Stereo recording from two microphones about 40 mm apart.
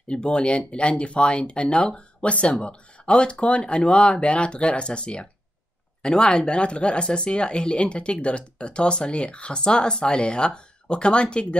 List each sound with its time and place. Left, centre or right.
0.1 s speech: left